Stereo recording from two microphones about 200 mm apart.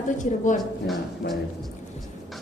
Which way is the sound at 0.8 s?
Centre (ahead or behind).